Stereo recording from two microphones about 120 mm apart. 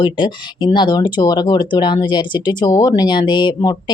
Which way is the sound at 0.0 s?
40° left (ahead or behind).